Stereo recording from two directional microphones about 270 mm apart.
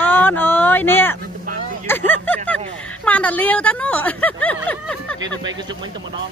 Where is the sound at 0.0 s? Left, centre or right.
Centre.